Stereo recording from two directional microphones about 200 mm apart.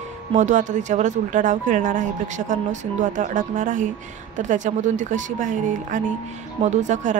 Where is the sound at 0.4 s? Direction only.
40° right (ahead or behind).